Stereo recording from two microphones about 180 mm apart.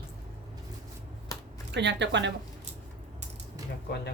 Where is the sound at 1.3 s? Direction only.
20° left (ahead or behind).